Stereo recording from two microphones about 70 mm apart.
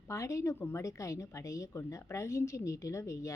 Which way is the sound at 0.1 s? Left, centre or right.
Left.